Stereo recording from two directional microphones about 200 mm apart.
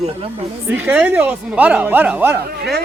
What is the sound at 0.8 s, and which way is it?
Speech, 10° right (ahead or behind).